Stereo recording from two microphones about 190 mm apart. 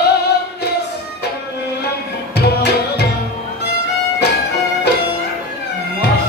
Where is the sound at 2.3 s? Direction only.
60° left (ahead or behind).